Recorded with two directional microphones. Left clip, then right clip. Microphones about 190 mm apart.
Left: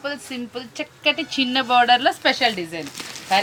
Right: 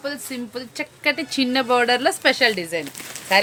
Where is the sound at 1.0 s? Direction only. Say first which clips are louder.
Left 1 dB; 35° right (ahead or behind).